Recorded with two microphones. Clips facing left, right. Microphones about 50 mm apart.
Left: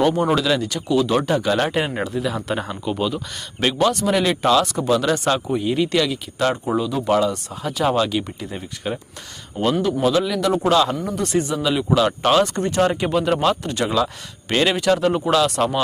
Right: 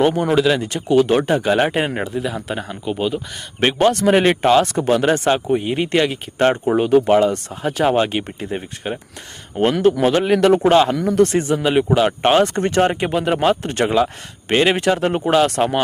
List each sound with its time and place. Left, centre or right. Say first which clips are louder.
0.0 s speech: right 3 dB; right
0.7 s speech: right 4 dB; right; by 2.3 s centre
2.3 s speech: left 1 dB; centre
3.6 s speech: right 3 dB; right
6.7 s a man's voice: right 8 dB; right
7.1 s speech: right 4 dB; right
9.8 s a man's voice: right 6 dB; right
10.6 s speech: right 4 dB; right
11.0 s a man's voice: right 10 dB; right
11.3 s speech: right 2 dB; right
13.9 s speech: right 3 dB; right